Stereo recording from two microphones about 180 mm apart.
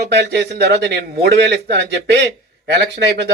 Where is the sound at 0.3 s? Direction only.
65° right (ahead or behind).